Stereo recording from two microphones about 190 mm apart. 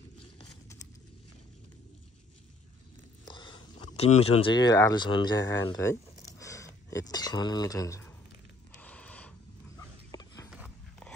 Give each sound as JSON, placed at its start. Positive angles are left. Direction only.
{"t": 3.3, "sound": "speech", "side_deg": 25}
{"t": 8.7, "sound": "a sound", "side_deg": 5}
{"t": 9.8, "sound": "dog", "side_deg": 20}